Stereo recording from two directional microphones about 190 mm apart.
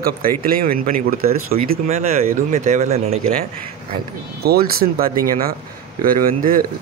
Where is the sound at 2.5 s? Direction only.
40° right (ahead or behind).